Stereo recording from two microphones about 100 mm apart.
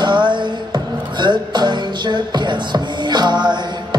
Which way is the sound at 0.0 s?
50° right (ahead or behind).